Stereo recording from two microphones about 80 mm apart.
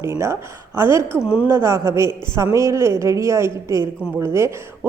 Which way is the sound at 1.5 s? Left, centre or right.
Right.